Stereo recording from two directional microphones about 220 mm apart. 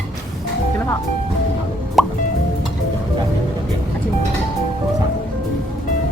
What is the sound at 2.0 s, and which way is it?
Music, centre (ahead or behind).